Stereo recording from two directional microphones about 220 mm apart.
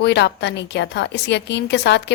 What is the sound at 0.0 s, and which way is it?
A woman's voice, 50° left (ahead or behind).